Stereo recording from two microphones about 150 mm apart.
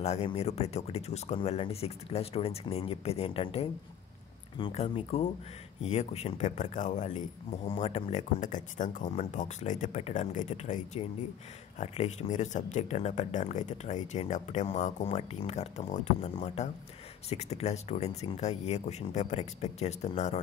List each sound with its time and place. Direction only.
0.0 s speech: 45° left (ahead or behind)
7.6 s speech: 40° left (ahead or behind)